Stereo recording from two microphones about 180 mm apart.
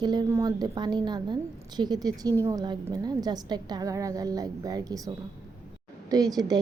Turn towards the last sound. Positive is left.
turn(degrees=-20)  # may be behind; listen again after turning